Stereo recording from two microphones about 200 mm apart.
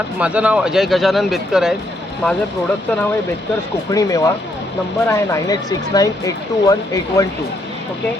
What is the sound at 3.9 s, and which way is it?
Speech, 15° left (ahead or behind).